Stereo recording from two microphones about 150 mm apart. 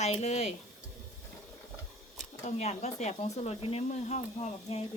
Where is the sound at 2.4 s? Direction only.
50° left (ahead or behind).